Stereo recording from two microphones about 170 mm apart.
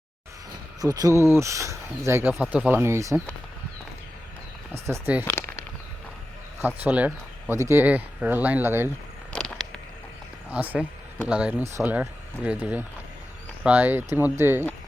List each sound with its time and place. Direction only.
0.8 s speech: 20° right (ahead or behind)
4.9 s speech: 10° right (ahead or behind)
5.2 s speech: 10° left (ahead or behind)
6.6 s speech: 10° right (ahead or behind)
9.3 s a sound: 5° left (ahead or behind)
10.5 s speech: 10° right (ahead or behind)